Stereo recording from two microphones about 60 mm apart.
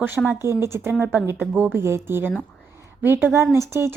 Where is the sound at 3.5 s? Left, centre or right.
Right.